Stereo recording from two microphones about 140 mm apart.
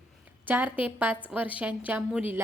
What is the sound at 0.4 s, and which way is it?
A woman's voice, 15° right (ahead or behind).